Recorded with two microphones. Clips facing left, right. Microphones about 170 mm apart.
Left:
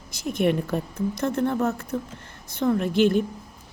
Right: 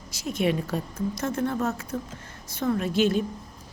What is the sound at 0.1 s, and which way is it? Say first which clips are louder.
A woman's voice: left 3 dB; 55° left (ahead or behind).